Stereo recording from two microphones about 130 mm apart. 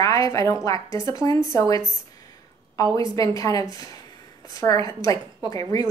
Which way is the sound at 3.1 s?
25° left (ahead or behind).